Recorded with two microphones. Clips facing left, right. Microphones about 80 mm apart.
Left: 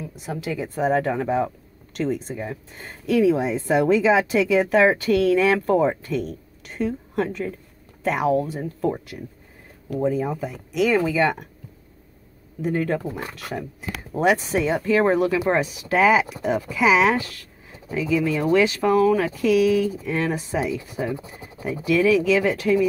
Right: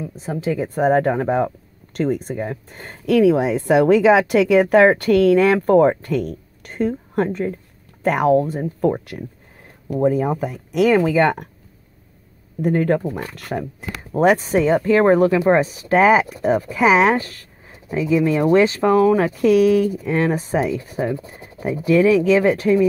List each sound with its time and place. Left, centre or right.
0.1 s speech: right
0.6 s speech: right
12.6 s speech: right